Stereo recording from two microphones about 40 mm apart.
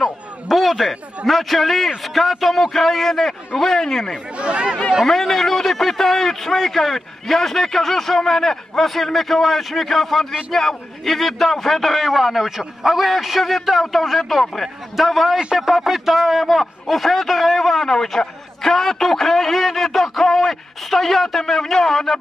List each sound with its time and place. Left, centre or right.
0.5 s a man's voice: centre
4.4 s speech: right
5.0 s a man's voice: centre